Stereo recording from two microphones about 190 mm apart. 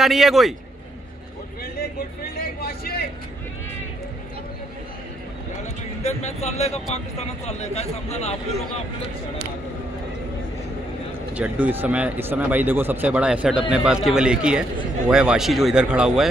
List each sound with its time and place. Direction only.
0.0 s speech: centre (ahead or behind)
2.3 s a sound: 55° left (ahead or behind)
5.6 s speech: 35° left (ahead or behind)
11.3 s speech: 10° right (ahead or behind)